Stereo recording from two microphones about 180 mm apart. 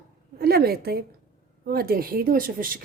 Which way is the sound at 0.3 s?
60° right (ahead or behind).